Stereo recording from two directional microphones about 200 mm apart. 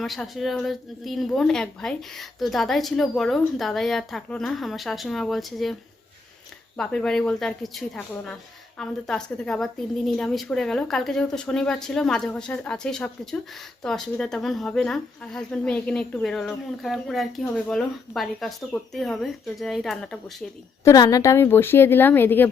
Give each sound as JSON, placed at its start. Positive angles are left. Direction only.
{"t": 0.0, "sound": "speech", "side_deg": 0}
{"t": 6.7, "sound": "speech", "side_deg": 5}
{"t": 20.8, "sound": "a woman's voice", "side_deg": 20}